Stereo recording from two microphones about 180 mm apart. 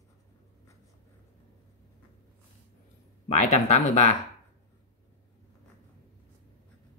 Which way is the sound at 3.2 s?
40° left (ahead or behind).